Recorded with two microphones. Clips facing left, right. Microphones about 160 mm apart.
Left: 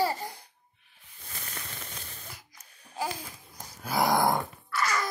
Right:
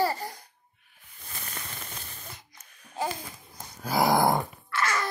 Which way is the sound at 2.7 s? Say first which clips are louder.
Right 1 dB; 30° left (ahead or behind).